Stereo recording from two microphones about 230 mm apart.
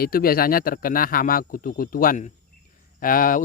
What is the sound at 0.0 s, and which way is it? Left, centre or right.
Speech, left.